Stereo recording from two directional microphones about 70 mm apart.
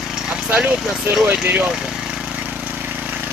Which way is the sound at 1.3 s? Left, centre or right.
Right.